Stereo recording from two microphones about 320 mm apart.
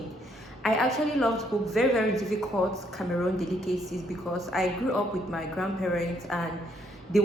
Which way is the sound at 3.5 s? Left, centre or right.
Right.